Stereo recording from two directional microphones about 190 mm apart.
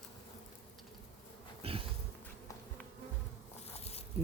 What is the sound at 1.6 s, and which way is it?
Speech, 30° right (ahead or behind).